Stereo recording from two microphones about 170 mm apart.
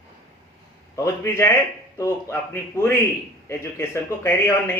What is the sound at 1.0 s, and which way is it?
A man's voice, 15° left (ahead or behind).